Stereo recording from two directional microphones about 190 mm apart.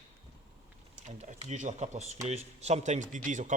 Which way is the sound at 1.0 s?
40° right (ahead or behind).